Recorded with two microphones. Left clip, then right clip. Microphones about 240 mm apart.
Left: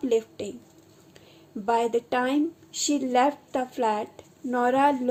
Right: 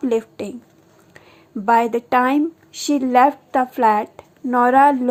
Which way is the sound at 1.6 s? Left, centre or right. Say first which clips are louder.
Right 8 dB; right.